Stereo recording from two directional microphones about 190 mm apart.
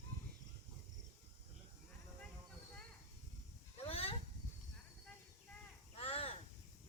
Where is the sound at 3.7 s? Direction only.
30° left (ahead or behind).